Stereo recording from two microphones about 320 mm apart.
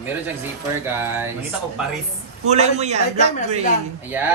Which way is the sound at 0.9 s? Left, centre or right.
Centre.